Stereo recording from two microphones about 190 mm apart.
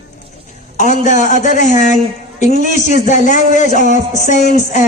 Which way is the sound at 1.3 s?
40° left (ahead or behind).